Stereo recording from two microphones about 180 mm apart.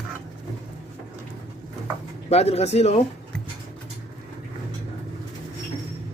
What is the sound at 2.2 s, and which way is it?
Speech, 35° left (ahead or behind).